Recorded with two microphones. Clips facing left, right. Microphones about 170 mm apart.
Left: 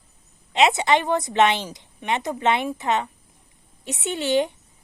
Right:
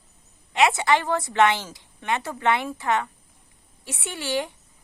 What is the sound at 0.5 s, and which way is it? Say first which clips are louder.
A woman's voice: left 2 dB; 20° left (ahead or behind).